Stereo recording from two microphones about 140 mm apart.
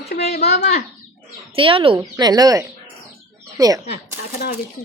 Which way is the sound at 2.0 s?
30° right (ahead or behind).